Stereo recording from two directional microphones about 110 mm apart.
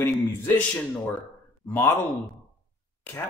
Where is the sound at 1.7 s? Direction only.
20° left (ahead or behind).